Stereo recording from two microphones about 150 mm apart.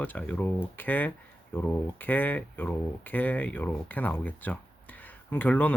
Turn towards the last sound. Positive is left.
turn(degrees=10)  # may be behind; listen again after turning